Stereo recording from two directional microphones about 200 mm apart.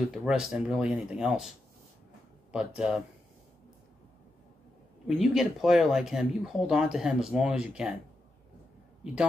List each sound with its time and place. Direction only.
0.1 s speech: centre (ahead or behind)
2.5 s speech: 5° right (ahead or behind)
5.0 s speech: centre (ahead or behind)